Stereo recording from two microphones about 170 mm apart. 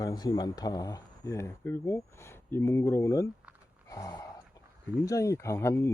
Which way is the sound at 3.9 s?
20° left (ahead or behind).